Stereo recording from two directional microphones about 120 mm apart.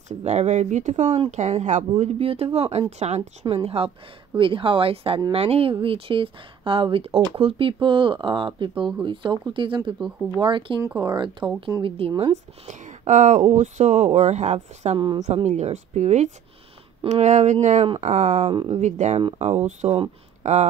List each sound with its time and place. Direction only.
0.2 s speech: 70° right (ahead or behind)
3.4 s speech: 50° right (ahead or behind)
12.0 s speech: 55° right (ahead or behind)
12.6 s speech: 90° right; by 20.6 s 70° right (ahead or behind)